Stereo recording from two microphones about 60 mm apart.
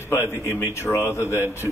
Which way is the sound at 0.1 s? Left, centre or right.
Left.